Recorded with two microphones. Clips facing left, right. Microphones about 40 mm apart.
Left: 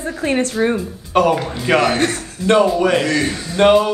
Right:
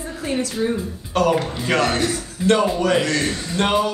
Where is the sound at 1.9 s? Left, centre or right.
Left.